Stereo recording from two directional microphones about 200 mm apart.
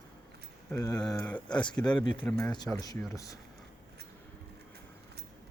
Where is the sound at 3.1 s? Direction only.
15° left (ahead or behind).